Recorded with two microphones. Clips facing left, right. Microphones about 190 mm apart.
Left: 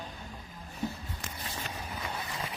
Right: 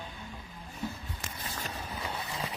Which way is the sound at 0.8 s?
20° left (ahead or behind).